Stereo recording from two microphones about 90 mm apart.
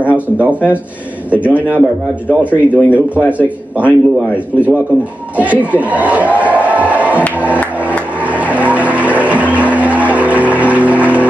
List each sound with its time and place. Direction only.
0.0 s a man's voice: 15° right (ahead or behind)
5.3 s a sound: 15° right (ahead or behind)
7.3 s music: 15° right (ahead or behind)
8.2 s vehicle: 15° right (ahead or behind)